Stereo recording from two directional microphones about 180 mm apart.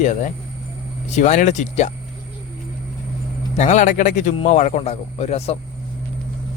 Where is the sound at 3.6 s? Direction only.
40° left (ahead or behind).